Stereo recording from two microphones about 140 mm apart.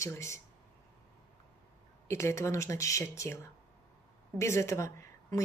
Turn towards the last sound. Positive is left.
turn(degrees=20)  # may be behind; listen again after turning